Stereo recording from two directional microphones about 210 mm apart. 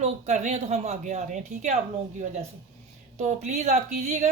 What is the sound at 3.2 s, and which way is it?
Speech, 35° right (ahead or behind).